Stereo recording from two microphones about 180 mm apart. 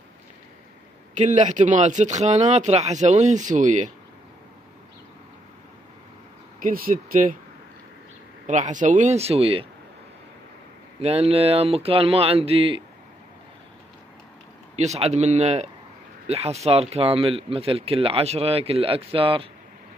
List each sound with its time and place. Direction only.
1.1 s speech: 45° right (ahead or behind)
6.6 s speech: 55° right (ahead or behind)
8.5 s speech: 45° right (ahead or behind)
11.0 s speech: 35° right (ahead or behind)
14.8 s speech: 35° right (ahead or behind)